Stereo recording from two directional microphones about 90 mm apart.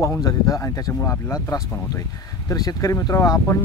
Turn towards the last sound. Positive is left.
turn(degrees=35)  # may be behind; listen again after turning